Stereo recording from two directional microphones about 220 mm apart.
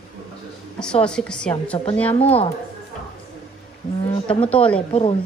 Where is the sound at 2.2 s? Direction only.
25° left (ahead or behind).